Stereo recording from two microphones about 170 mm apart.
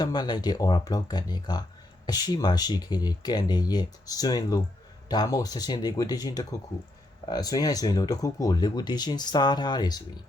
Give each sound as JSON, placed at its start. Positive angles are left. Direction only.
{"t": 0.0, "sound": "speech", "side_deg": 25}